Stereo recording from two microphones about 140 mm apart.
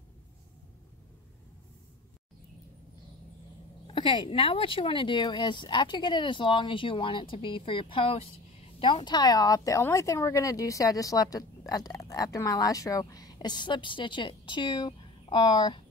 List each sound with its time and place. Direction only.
3.8 s speech: 35° left (ahead or behind)